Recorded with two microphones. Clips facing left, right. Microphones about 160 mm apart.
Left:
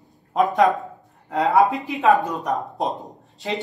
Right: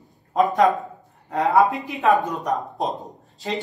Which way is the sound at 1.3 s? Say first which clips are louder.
Even; 20° left (ahead or behind).